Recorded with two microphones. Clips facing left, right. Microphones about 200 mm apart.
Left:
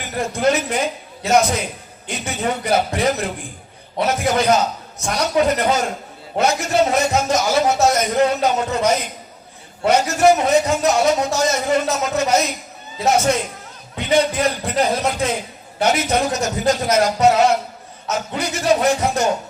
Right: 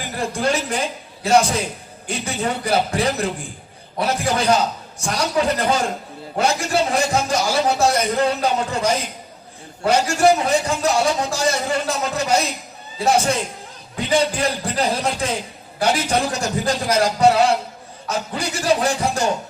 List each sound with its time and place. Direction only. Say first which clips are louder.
0.2 s a man's voice: left 3 dB; 30° right (ahead or behind)